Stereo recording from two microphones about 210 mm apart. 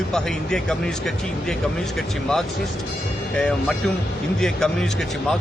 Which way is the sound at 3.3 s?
5° left (ahead or behind).